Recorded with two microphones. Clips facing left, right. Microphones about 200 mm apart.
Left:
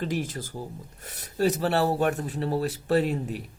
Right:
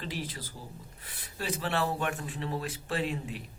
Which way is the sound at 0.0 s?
45° left (ahead or behind).